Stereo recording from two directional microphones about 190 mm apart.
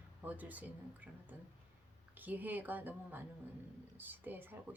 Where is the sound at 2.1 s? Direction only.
10° right (ahead or behind).